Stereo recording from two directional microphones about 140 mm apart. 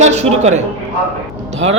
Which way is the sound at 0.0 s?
55° right (ahead or behind).